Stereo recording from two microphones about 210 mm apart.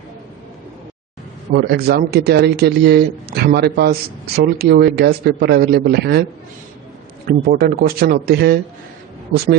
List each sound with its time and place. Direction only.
1.5 s speech: 50° right (ahead or behind)
7.3 s speech: 45° right (ahead or behind)